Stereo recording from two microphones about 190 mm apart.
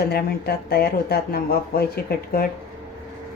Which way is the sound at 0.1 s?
55° left (ahead or behind).